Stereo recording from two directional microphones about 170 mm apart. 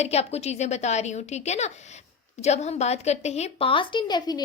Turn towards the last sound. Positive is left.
turn(degrees=25)  # may be behind; listen again after turning